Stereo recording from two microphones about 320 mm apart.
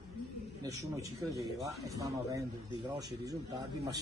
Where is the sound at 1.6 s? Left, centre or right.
Centre.